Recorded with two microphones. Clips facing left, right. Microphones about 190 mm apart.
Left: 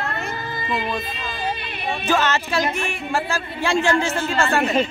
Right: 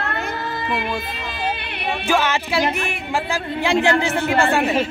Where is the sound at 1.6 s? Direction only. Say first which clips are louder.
Right 1 dB; 70° right (ahead or behind).